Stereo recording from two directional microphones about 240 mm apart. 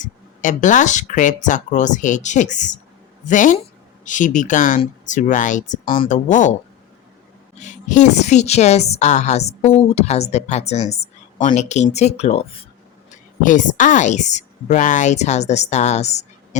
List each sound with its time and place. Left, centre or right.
0.0 s speech: left
7.6 s a woman's voice: left